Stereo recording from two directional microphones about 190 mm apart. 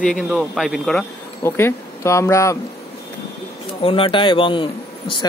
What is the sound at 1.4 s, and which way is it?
Speech, 15° left (ahead or behind).